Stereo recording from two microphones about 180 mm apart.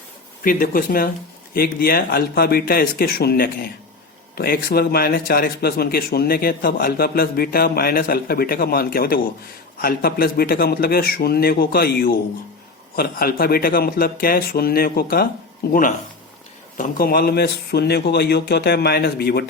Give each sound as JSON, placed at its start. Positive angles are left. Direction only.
{"t": 0.4, "sound": "speech", "side_deg": 50}